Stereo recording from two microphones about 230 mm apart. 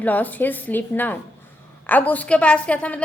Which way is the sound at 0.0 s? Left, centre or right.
Centre.